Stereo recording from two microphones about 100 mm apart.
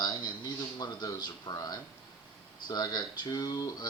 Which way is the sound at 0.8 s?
40° left (ahead or behind).